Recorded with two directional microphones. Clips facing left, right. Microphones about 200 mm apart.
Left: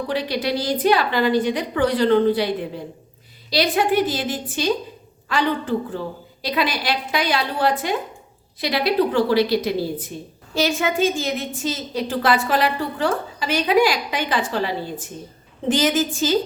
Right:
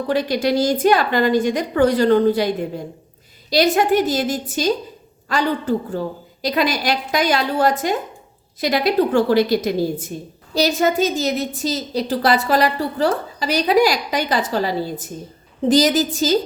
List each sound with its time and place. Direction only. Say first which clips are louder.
0.1 s a woman's voice: right 6 dB; 45° right (ahead or behind)